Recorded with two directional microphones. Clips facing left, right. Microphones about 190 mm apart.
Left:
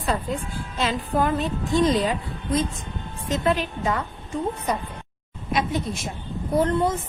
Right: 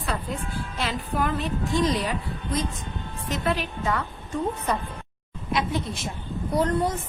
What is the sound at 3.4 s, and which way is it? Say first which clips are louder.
Speech: left 3 dB; 20° left (ahead or behind).